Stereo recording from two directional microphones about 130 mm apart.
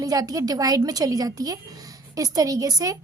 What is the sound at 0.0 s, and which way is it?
A woman's voice, 30° right (ahead or behind).